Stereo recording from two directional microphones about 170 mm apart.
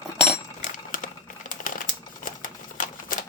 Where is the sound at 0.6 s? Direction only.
50° left (ahead or behind).